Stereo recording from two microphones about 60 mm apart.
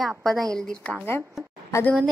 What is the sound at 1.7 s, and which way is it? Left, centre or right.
Speech, left.